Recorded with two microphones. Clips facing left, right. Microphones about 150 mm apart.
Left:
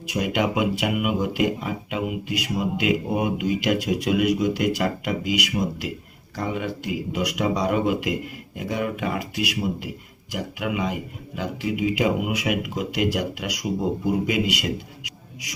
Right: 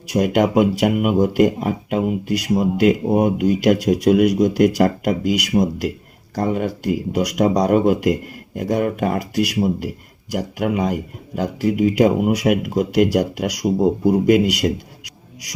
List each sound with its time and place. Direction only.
0.1 s speech: 45° right (ahead or behind)